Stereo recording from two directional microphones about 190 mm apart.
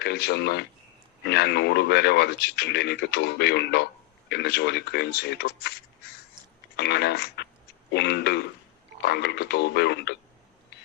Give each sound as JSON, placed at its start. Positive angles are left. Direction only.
{"t": 0.0, "sound": "speech", "side_deg": 60}